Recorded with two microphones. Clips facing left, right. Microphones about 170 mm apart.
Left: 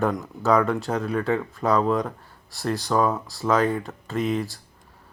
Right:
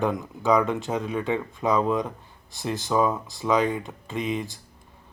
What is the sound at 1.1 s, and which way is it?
Speech, 15° right (ahead or behind).